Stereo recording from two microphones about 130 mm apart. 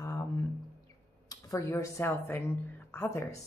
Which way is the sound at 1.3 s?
25° left (ahead or behind).